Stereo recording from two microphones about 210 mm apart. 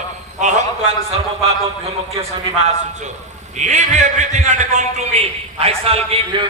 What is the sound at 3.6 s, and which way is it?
A man's voice, 35° right (ahead or behind).